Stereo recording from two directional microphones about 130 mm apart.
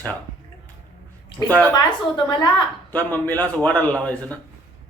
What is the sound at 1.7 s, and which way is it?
Speech, 35° left (ahead or behind).